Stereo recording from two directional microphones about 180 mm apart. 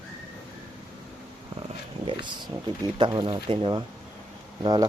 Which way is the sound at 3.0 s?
25° right (ahead or behind).